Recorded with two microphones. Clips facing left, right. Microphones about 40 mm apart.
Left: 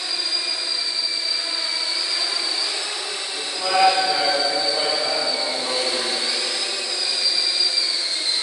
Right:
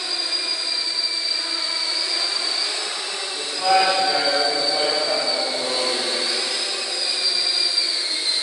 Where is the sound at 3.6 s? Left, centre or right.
Centre.